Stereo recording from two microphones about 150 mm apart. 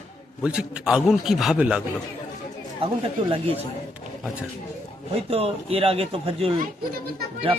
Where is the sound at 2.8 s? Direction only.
35° right (ahead or behind).